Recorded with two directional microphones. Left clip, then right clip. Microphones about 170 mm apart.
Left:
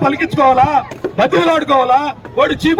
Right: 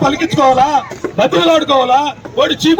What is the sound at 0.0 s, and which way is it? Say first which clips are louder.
A man's voice: right 1 dB; 20° right (ahead or behind).